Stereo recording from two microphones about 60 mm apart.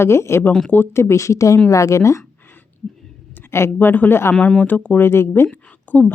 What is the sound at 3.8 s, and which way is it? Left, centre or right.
Speech, left.